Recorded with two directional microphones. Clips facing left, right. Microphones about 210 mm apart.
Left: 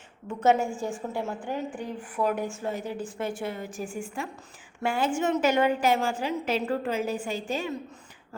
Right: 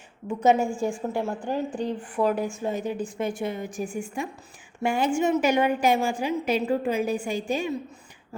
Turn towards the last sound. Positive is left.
turn(degrees=-15)  # may be behind; listen again after turning